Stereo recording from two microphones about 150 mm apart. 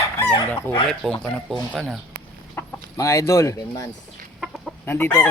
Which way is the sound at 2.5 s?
20° left (ahead or behind).